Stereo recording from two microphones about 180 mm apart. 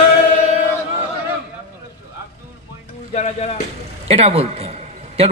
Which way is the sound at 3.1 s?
40° left (ahead or behind).